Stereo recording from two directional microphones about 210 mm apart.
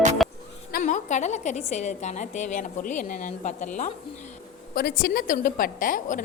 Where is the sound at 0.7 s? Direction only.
35° left (ahead or behind).